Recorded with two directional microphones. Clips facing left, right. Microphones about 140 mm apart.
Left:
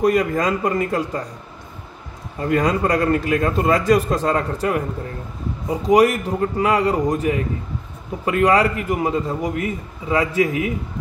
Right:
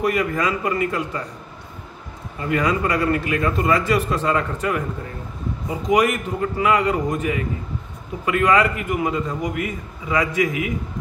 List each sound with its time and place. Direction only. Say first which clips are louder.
0.0 s a man's voice: left 3 dB; 40° left (ahead or behind)
2.6 s a man's voice: left 1 dB; 40° left (ahead or behind)
5.9 s a man's voice: left 4 dB; 35° left (ahead or behind)